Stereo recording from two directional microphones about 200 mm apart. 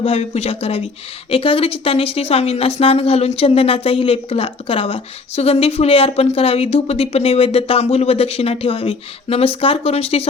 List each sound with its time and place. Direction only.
0.0 s speech: 30° left (ahead or behind)